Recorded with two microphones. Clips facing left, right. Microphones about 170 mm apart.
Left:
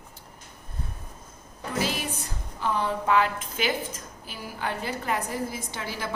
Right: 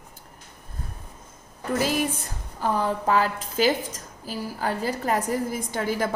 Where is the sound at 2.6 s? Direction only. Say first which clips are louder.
Right 3 dB; 40° right (ahead or behind).